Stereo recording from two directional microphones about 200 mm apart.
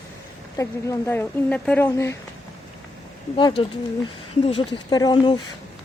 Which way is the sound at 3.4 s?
25° left (ahead or behind).